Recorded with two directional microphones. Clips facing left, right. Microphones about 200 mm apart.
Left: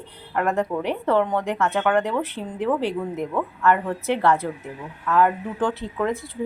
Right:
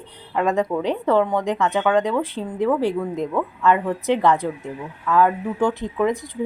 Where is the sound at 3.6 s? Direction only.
15° right (ahead or behind).